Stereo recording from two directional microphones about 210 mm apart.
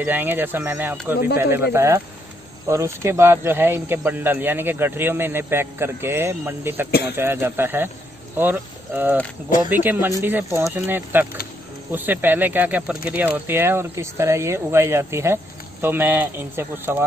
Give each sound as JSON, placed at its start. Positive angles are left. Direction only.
{"t": 0.0, "sound": "speech", "side_deg": -10}